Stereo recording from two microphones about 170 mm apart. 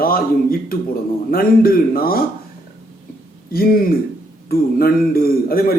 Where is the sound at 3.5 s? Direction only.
60° left (ahead or behind).